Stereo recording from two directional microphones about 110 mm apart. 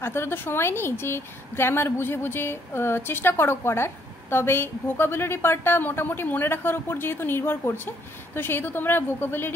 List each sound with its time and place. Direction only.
0.0 s a woman's voice: 20° left (ahead or behind)